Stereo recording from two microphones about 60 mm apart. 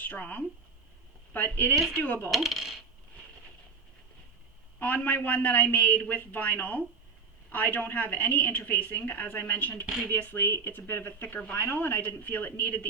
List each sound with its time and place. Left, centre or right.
0.0 s a woman's voice: left
2.3 s speech: centre
4.8 s a man's voice: left
9.8 s speech: centre
10.1 s a woman's voice: left